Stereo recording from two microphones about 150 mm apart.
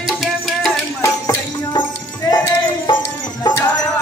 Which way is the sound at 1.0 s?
25° left (ahead or behind).